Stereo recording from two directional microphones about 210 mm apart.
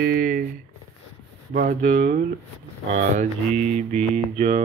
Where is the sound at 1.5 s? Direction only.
40° right (ahead or behind).